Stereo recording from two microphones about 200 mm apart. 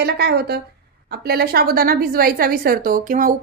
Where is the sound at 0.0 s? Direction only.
55° right (ahead or behind).